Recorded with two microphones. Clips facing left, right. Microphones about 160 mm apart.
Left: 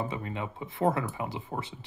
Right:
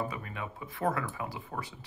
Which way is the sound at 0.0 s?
25° left (ahead or behind).